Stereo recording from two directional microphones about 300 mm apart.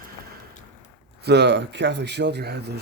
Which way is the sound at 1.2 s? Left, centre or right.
Right.